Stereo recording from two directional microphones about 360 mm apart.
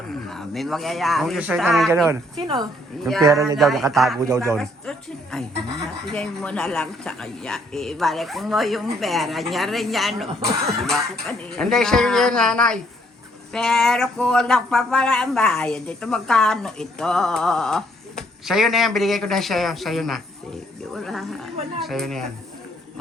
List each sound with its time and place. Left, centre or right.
0.1 s speech: centre